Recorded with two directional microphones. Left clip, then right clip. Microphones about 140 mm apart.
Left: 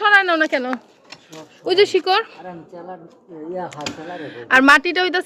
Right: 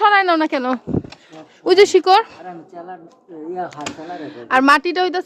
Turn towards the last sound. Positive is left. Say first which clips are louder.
# left 1 dB
turn(degrees=-25)  # may be behind; listen again after turning